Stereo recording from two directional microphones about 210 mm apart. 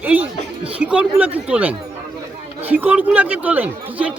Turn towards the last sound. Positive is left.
turn(degrees=-5)  # may be behind; listen again after turning